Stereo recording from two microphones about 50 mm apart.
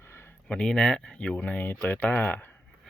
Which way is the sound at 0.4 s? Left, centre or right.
Centre.